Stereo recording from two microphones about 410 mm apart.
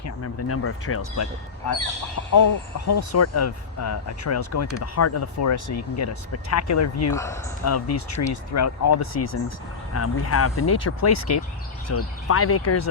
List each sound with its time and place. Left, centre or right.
0.0 s speech: left
2.3 s speech: left
7.1 s speech: centre
7.6 s speech: left